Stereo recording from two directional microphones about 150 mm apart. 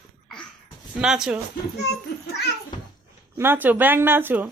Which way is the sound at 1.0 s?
5° right (ahead or behind).